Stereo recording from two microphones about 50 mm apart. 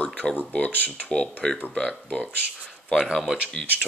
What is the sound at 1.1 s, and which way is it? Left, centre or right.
Speech, centre.